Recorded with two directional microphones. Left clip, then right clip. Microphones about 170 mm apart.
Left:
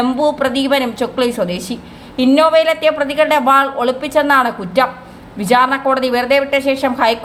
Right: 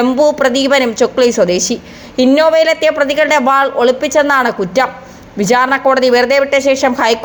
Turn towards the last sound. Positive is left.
turn(degrees=-30)  # may be behind; listen again after turning